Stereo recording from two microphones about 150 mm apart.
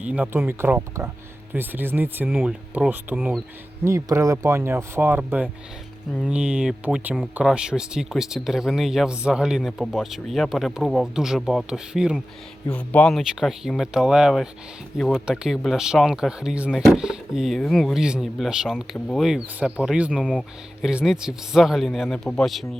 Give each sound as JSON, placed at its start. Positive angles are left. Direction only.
{"t": 0.0, "sound": "speech", "side_deg": -10}
{"t": 3.8, "sound": "speech", "side_deg": -20}
{"t": 12.7, "sound": "speech", "side_deg": 10}
{"t": 18.9, "sound": "speech", "side_deg": 5}
{"t": 19.2, "sound": "speech", "side_deg": -5}